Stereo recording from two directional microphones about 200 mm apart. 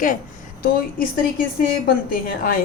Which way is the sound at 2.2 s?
45° left (ahead or behind).